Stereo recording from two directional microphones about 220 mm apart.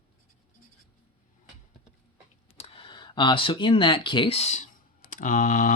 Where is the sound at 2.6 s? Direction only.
25° left (ahead or behind).